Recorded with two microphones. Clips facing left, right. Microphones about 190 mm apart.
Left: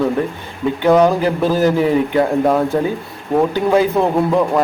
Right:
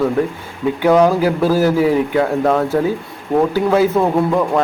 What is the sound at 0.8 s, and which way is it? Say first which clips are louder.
Speech: even; 5° right (ahead or behind).